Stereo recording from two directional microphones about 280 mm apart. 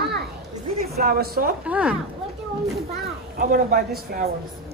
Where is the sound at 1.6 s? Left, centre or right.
Centre.